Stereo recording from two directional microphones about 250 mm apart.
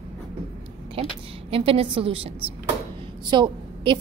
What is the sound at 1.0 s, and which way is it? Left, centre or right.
A woman's voice, right.